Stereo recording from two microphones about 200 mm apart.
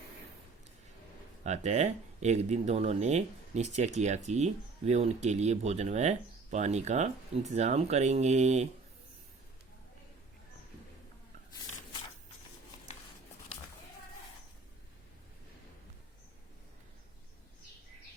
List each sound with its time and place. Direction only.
1.5 s speech: 35° right (ahead or behind)